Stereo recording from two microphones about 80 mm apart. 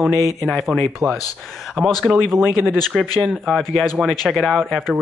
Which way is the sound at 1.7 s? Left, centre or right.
Centre.